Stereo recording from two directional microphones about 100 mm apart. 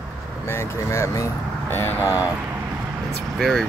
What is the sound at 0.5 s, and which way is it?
Speech, 30° left (ahead or behind).